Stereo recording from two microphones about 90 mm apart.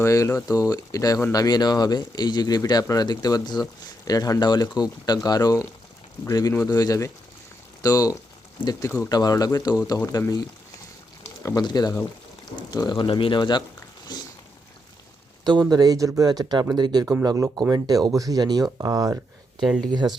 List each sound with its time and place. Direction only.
0.0 s speech: 35° left (ahead or behind)
11.4 s speech: 45° left (ahead or behind)
13.1 s speech: 75° left (ahead or behind); by 13.7 s 60° left (ahead or behind)
14.1 s a sound: 50° left (ahead or behind)
15.7 s speech: 45° right (ahead or behind)
19.5 s speech: centre (ahead or behind)
19.9 s speech: 55° right (ahead or behind)